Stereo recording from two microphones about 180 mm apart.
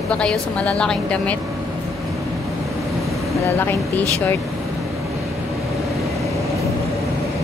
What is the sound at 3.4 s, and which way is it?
Speech, 10° left (ahead or behind).